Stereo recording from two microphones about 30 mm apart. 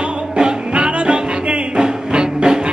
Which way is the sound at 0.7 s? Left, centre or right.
Right.